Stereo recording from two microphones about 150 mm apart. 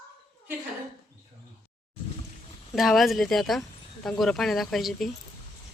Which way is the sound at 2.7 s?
Centre (ahead or behind).